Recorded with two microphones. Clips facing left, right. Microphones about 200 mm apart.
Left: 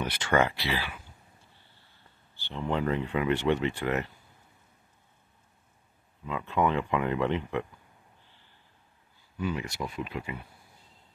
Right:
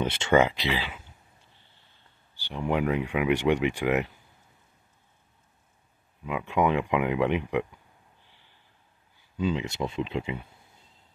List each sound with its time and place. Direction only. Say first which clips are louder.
0.0 s speech: right 4 dB; 25° right (ahead or behind)
2.3 s speech: right 3 dB; 15° right (ahead or behind)
6.2 s speech: right 2 dB; 15° right (ahead or behind)
8.2 s snort: even; 15° right (ahead or behind)
9.4 s speech: right 4 dB; 20° right (ahead or behind)